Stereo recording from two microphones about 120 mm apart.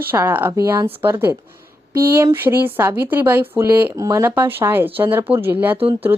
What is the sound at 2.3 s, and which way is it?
A woman's voice, 20° right (ahead or behind).